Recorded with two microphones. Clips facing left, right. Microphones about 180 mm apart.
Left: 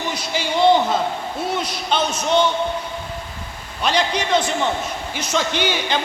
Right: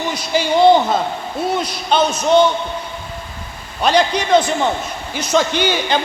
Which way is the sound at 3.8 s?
40° right (ahead or behind).